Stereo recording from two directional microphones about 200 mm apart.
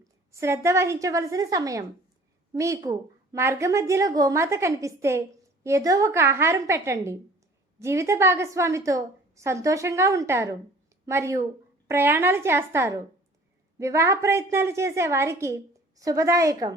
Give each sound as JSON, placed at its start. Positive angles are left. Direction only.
{"t": 0.3, "sound": "a woman's voice", "side_deg": -15}